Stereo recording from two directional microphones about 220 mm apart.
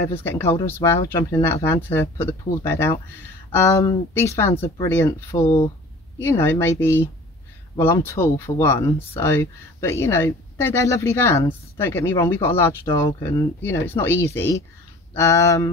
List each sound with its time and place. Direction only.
0.0 s speech: 10° left (ahead or behind)